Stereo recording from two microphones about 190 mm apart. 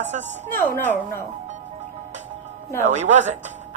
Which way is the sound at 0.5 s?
10° left (ahead or behind).